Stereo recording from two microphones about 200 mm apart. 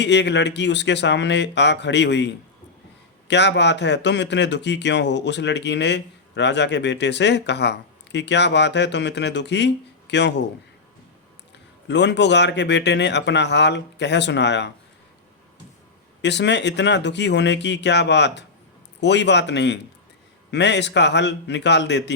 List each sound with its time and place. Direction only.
0.0 s speech: 60° left (ahead or behind)
11.9 s speech: 60° left (ahead or behind)
16.2 s speech: 60° left (ahead or behind)